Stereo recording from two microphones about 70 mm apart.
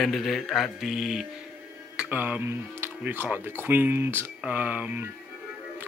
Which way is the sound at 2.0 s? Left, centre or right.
Right.